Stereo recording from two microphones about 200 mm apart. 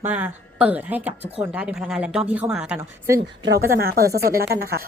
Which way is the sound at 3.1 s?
55° right (ahead or behind).